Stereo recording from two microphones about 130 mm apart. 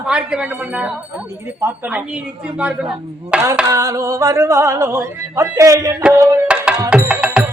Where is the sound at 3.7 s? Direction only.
25° right (ahead or behind).